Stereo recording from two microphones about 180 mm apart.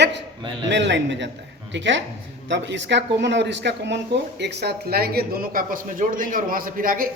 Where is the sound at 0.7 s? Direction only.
80° right.